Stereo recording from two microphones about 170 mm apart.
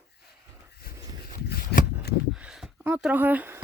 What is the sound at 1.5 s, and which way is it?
Shuffling cards, 60° left (ahead or behind).